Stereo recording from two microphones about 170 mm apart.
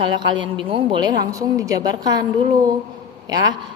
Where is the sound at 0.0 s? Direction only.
25° right (ahead or behind).